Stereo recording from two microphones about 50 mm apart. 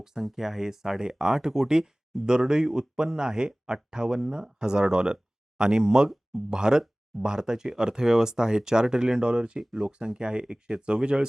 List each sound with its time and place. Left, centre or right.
0.0 s speech: centre